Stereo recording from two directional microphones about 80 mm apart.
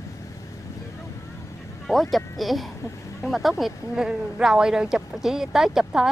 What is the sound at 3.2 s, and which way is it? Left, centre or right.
Speech, centre.